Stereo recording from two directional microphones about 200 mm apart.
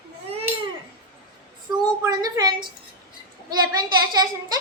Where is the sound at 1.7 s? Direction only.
20° right (ahead or behind).